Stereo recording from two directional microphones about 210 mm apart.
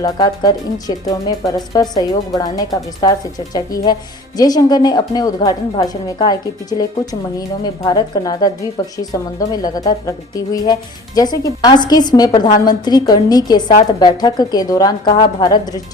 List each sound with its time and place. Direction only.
0.0 s a woman's voice: 15° left (ahead or behind)